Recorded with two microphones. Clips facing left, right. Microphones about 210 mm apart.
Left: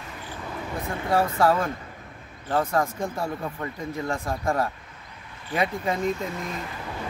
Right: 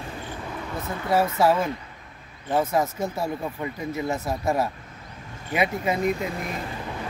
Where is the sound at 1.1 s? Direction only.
5° right (ahead or behind).